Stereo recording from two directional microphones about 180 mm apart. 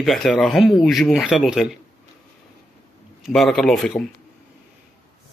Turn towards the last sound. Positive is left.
turn(degrees=0)  # may be behind; listen again after turning